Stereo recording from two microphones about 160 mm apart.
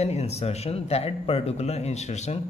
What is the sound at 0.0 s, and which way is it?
Speech, 40° left (ahead or behind).